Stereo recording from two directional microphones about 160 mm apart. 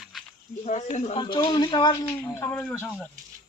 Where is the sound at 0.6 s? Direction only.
45° left (ahead or behind).